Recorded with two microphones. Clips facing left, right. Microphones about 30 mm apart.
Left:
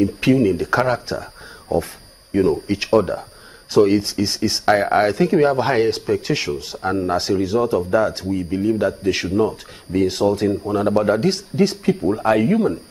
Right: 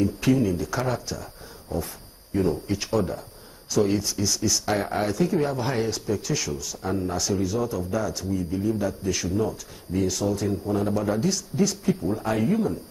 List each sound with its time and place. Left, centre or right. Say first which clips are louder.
0.0 s speech: left 6 dB; left